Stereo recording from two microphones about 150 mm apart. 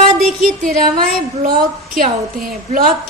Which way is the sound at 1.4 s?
75° right (ahead or behind).